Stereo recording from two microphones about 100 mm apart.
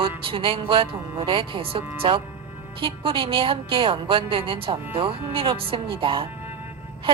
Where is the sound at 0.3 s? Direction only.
65° right (ahead or behind).